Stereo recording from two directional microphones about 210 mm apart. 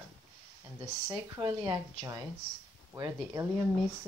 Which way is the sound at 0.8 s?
20° right (ahead or behind).